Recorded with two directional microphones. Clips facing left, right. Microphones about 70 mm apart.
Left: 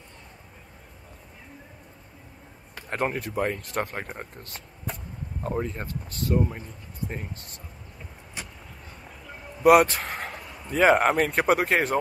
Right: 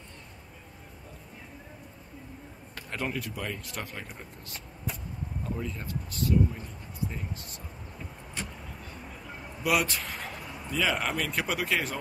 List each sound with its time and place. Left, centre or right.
2.9 s speech: left
9.6 s speech: left